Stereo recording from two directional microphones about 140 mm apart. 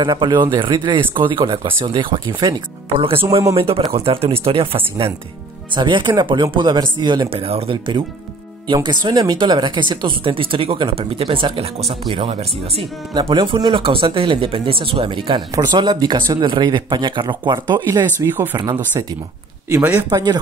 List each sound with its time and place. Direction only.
0.0 s speech: 30° right (ahead or behind)
13.1 s speech: 35° right (ahead or behind); by 18.6 s 15° right (ahead or behind)
18.6 s speech: 25° right (ahead or behind)
19.7 s speech: 15° right (ahead or behind)
20.1 s speech: 25° right (ahead or behind)